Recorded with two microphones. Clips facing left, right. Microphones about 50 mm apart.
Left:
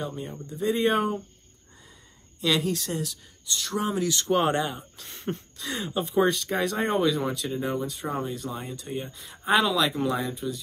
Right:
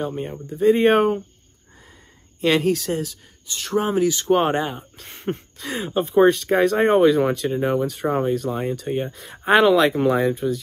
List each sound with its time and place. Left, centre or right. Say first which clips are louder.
0.0 s speech: right 7 dB; right
2.4 s speech: right 7 dB; right
4.1 s speech: right 5 dB; right